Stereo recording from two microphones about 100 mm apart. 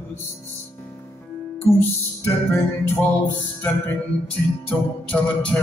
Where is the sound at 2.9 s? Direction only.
20° left (ahead or behind).